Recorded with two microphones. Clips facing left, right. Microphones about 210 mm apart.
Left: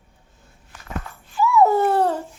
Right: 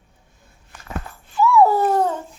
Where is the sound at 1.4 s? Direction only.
20° left (ahead or behind).